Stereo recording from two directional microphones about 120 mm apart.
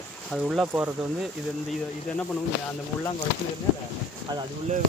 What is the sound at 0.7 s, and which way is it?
Speech, 20° right (ahead or behind).